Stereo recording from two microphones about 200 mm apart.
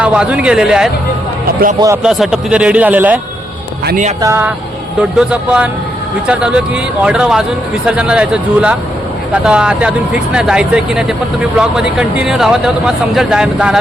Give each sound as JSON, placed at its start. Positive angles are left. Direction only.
{"t": 0.0, "sound": "speech", "side_deg": -5}
{"t": 2.0, "sound": "speech", "side_deg": 0}
{"t": 3.8, "sound": "speech", "side_deg": -40}
{"t": 4.2, "sound": "speech", "side_deg": -10}